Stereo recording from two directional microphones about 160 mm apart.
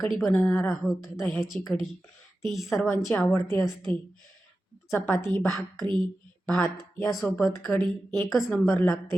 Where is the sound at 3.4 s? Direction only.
15° left (ahead or behind).